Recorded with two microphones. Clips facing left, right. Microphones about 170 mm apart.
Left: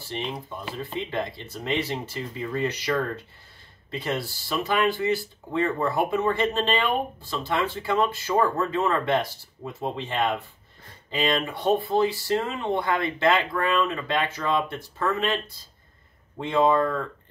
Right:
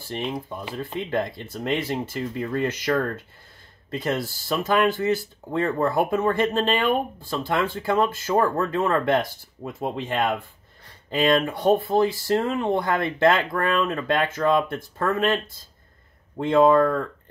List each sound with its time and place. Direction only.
1.1 s speech: 50° right (ahead or behind)